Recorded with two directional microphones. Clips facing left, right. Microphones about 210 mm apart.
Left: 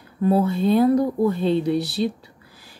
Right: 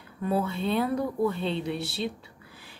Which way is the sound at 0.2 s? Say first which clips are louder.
Left 8 dB; 40° left (ahead or behind).